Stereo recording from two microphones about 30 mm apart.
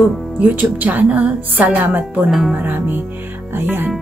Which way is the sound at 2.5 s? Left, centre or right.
Right.